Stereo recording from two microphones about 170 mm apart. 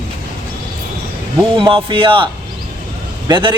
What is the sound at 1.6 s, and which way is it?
Speech, 30° right (ahead or behind).